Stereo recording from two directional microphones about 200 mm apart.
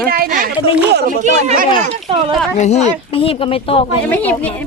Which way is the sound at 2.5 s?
35° left (ahead or behind).